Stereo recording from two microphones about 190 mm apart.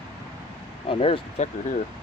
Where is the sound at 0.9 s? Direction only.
30° left (ahead or behind).